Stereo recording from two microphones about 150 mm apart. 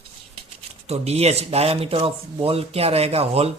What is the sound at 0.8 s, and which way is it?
Speech, 45° right (ahead or behind).